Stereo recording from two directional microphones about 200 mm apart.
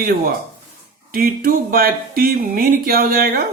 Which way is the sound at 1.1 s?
45° right (ahead or behind).